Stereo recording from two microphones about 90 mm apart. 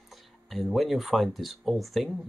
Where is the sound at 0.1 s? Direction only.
Centre (ahead or behind).